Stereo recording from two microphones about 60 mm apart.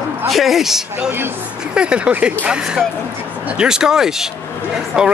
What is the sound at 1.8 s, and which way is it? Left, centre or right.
Speech, centre.